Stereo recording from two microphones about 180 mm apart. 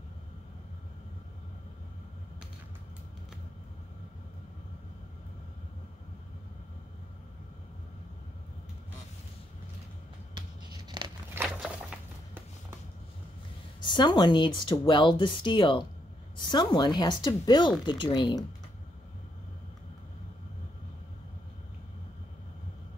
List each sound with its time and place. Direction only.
11.0 s crumpling: 25° right (ahead or behind)
11.4 s a sound: 5° right (ahead or behind)
13.8 s speech: 25° left (ahead or behind)